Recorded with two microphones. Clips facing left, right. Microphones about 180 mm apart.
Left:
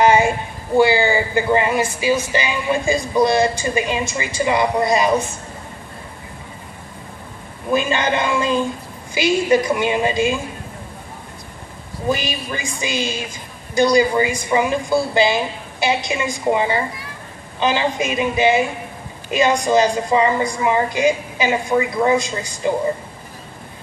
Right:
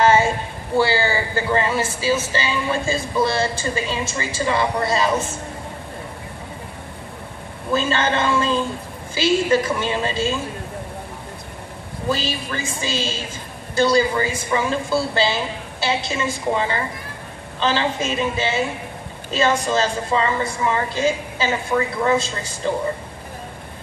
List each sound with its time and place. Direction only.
0.0 s a sound: 15° left (ahead or behind)
0.7 s a woman's voice: 15° left (ahead or behind)
7.7 s a woman's voice: 15° left (ahead or behind)
12.1 s a woman's voice: 15° left (ahead or behind)